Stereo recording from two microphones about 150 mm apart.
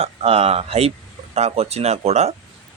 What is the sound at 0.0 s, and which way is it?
A man's voice, 40° right (ahead or behind).